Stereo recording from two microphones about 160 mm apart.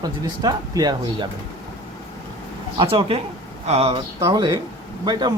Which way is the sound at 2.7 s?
35° right (ahead or behind).